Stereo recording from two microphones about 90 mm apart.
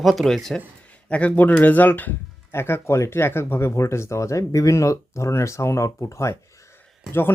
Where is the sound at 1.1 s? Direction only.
15° left (ahead or behind).